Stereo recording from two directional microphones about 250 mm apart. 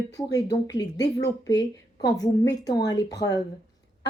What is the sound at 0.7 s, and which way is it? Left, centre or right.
Speech, left.